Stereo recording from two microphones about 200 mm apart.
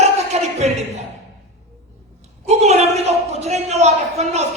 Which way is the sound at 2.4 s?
35° right (ahead or behind).